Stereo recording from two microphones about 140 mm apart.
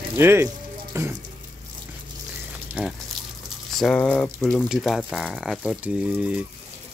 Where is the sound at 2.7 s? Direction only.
10° right (ahead or behind).